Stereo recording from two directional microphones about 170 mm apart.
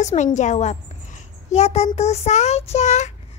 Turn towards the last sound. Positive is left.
turn(degrees=40)  # may be behind; listen again after turning